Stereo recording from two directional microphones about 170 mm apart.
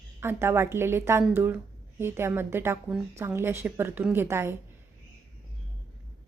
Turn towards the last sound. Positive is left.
turn(degrees=-15)  # may be behind; listen again after turning